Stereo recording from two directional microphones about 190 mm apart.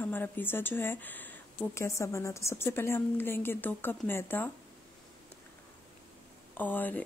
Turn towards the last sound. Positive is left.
turn(degrees=10)  # may be behind; listen again after turning